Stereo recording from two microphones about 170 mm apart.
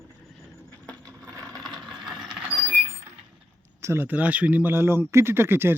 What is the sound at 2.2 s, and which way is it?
Train, 5° right (ahead or behind).